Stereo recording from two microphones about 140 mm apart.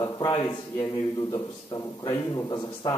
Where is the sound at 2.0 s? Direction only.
25° left (ahead or behind).